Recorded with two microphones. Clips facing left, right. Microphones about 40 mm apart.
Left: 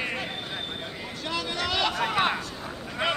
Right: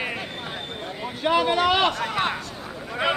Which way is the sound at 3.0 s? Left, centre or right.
Centre.